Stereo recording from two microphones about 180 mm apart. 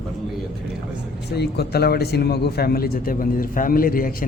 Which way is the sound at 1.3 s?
65° left (ahead or behind).